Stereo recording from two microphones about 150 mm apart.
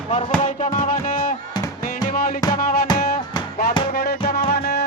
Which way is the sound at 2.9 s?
80° left.